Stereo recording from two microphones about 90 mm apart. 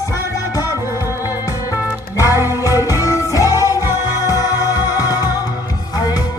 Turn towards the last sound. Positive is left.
turn(degrees=45)  # may be behind; listen again after turning